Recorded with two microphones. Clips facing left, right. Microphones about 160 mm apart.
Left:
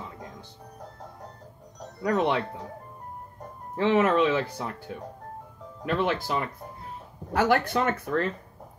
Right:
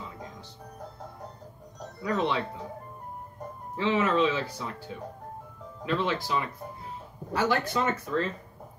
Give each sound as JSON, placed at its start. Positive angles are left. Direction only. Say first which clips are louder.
{"t": 2.0, "sound": "speech", "louder": "left 3 dB", "side_deg": 55}
{"t": 3.7, "sound": "speech", "louder": "left 4 dB", "side_deg": 55}
{"t": 5.9, "sound": "speech", "louder": "left 2 dB", "side_deg": 55}